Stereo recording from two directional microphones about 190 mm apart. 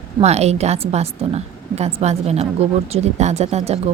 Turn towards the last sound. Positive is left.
turn(degrees=-35)  # may be behind; listen again after turning